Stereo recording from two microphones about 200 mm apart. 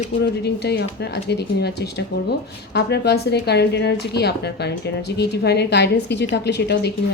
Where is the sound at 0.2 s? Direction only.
55° left (ahead or behind).